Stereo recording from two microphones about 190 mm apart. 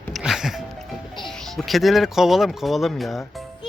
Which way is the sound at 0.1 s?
Centre (ahead or behind).